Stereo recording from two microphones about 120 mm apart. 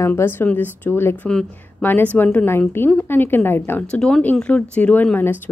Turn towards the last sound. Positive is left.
turn(degrees=15)  # may be behind; listen again after turning